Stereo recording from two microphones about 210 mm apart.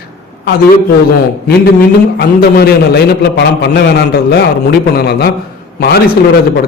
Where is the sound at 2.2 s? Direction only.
50° left (ahead or behind).